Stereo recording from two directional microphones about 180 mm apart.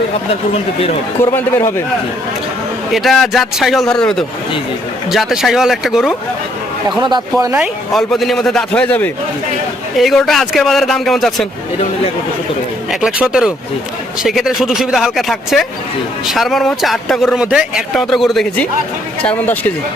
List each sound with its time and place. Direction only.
1.2 s speech: 15° left (ahead or behind)
2.9 s speech: centre (ahead or behind)
7.0 s speech: 20° right (ahead or behind)
7.5 s speech: centre (ahead or behind)
12.9 s speech: 5° right (ahead or behind)